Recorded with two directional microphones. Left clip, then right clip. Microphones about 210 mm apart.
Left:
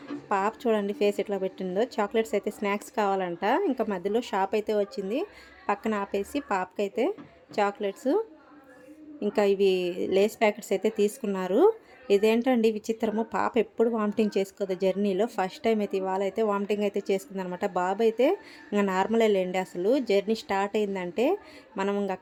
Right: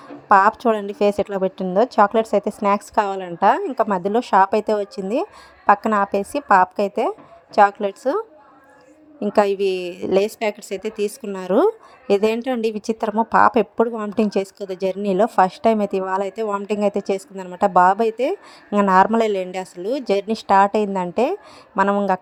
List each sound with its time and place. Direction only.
0.3 s a woman's voice: 25° right (ahead or behind)
9.2 s a woman's voice: 25° right (ahead or behind)